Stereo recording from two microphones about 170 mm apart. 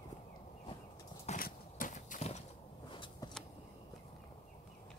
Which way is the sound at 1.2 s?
50° left (ahead or behind).